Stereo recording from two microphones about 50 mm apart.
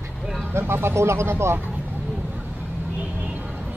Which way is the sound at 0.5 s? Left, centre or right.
Right.